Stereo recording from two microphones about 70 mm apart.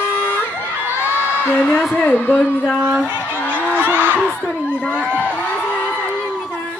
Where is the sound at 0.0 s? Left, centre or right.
Left.